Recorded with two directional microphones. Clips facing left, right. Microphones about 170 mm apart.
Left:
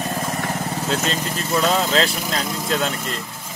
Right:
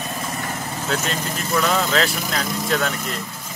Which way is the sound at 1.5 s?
25° left (ahead or behind).